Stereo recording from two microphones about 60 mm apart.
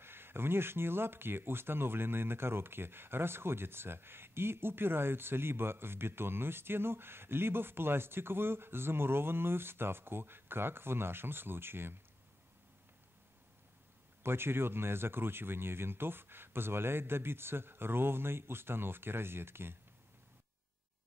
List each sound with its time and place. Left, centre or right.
0.0 s speech: right
14.2 s speech: right